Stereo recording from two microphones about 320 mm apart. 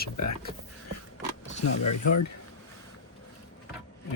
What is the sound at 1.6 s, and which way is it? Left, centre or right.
Speech, left.